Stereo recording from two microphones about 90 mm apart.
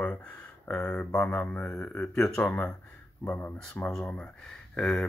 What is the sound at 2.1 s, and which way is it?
Speech, 5° left (ahead or behind).